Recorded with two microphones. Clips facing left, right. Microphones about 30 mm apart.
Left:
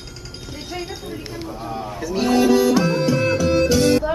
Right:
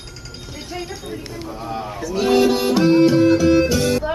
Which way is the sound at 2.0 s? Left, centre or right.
Centre.